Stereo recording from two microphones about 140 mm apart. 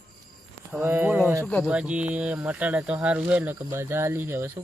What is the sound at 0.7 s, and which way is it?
Speech, 15° right (ahead or behind).